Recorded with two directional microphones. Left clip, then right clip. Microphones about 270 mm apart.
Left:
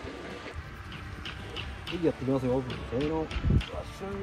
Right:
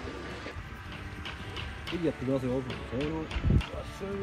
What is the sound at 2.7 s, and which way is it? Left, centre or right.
Speech, right.